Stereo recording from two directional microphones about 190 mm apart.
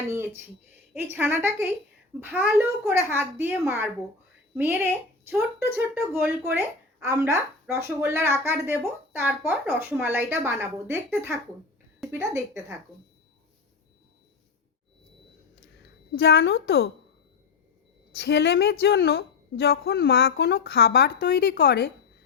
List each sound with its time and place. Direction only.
1.1 s speech: 10° right (ahead or behind)
15.8 s a woman's voice: 60° left (ahead or behind)
18.1 s a woman's voice: 60° left (ahead or behind)